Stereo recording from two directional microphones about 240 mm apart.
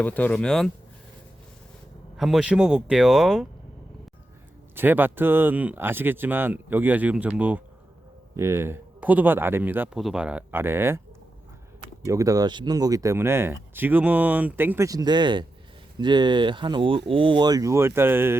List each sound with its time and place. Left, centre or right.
0.0 s speech: centre
2.1 s speech: centre
4.7 s speech: centre
12.0 s speech: centre